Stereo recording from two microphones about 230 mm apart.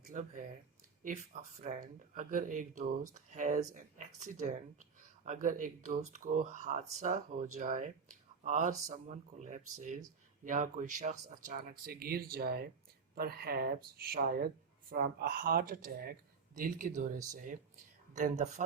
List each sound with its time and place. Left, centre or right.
0.1 s speech: right